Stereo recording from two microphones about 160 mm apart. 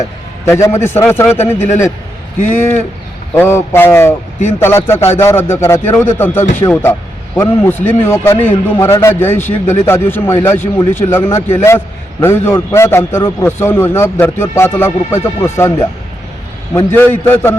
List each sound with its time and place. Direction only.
0.0 s a man's voice: 15° left (ahead or behind)
2.6 s a man's voice: 15° left (ahead or behind)
16.7 s a man's voice: 15° left (ahead or behind)